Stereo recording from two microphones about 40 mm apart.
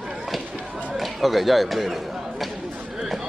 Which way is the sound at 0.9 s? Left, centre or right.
Centre.